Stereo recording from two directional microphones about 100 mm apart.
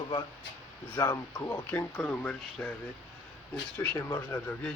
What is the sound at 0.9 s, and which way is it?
Speech, 30° left (ahead or behind).